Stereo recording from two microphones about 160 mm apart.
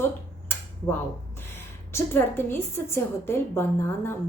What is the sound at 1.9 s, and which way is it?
A woman's voice, 15° left (ahead or behind).